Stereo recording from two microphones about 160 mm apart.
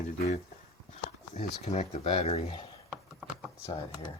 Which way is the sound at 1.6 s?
40° left (ahead or behind).